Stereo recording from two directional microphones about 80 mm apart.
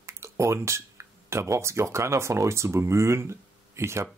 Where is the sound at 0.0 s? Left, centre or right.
Right.